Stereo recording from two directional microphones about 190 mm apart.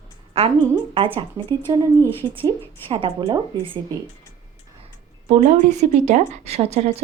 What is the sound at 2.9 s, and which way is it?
Speech, 25° right (ahead or behind).